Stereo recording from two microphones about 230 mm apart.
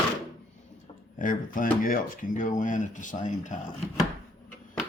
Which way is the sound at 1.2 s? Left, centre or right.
Left.